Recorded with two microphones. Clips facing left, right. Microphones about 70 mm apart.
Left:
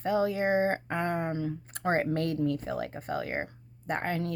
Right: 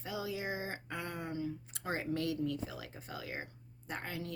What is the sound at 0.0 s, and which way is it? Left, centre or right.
Speech, left.